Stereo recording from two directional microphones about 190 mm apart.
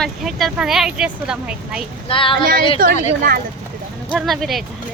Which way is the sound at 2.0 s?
25° left (ahead or behind).